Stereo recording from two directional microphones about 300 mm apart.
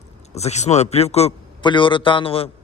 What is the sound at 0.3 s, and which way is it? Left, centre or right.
A man's voice, left.